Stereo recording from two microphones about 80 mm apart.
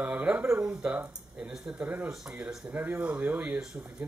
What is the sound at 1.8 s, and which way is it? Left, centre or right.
Speech, centre.